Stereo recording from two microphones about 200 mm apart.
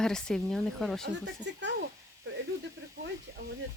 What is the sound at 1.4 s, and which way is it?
Speech, 60° right (ahead or behind).